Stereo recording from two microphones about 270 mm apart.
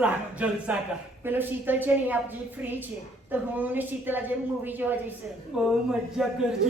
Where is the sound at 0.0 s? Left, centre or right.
Centre.